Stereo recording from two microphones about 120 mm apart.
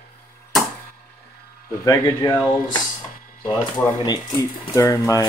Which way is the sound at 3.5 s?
35° left (ahead or behind).